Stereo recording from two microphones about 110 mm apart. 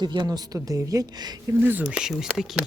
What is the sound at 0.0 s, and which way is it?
Speech, 40° right (ahead or behind).